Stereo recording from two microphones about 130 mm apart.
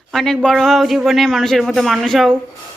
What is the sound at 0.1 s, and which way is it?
A woman's voice, centre (ahead or behind).